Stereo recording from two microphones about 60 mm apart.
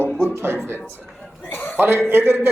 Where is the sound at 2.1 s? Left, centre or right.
Right.